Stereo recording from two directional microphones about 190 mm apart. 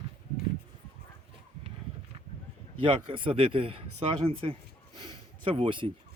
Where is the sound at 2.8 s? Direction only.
25° right (ahead or behind).